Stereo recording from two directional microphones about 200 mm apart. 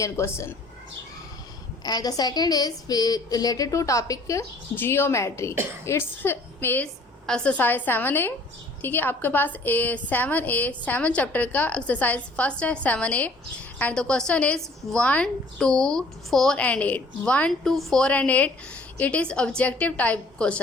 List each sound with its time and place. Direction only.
0.0 s a woman's voice: 15° left (ahead or behind)
1.8 s a woman's voice: 20° left (ahead or behind)